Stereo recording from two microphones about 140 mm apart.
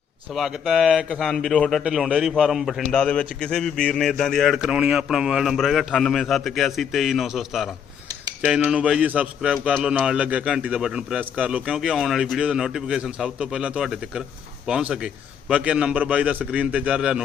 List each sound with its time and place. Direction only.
0.3 s a man's voice: centre (ahead or behind)